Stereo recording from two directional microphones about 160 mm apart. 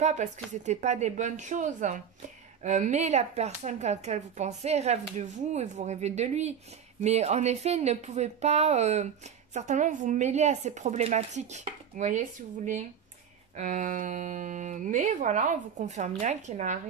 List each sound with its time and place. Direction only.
0.0 s speech: 45° right (ahead or behind)
13.6 s speech: 55° right (ahead or behind)